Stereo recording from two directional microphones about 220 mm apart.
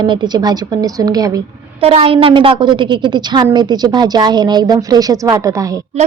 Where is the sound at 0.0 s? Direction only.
20° right (ahead or behind).